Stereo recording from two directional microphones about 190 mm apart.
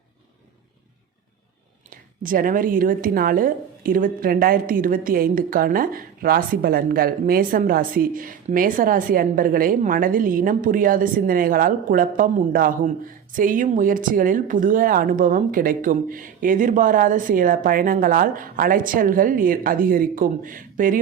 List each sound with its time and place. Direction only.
2.2 s a woman's voice: 45° right (ahead or behind)